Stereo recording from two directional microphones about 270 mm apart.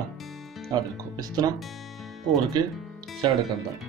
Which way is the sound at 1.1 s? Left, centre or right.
Centre.